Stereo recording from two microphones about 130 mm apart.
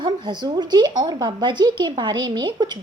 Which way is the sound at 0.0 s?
35° right (ahead or behind).